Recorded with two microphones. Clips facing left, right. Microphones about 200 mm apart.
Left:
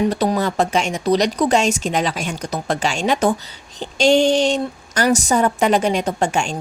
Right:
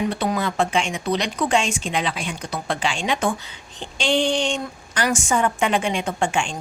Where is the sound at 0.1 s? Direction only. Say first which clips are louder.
Left 4 dB; 40° left (ahead or behind).